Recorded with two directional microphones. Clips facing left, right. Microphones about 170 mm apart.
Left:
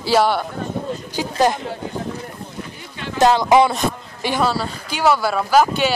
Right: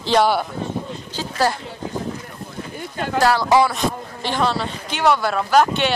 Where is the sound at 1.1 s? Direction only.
15° left (ahead or behind).